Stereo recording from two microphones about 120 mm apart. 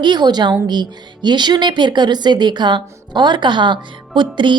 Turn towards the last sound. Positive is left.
turn(degrees=-40)  # may be behind; listen again after turning